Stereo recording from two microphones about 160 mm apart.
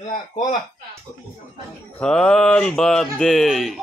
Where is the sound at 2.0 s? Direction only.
5° left (ahead or behind).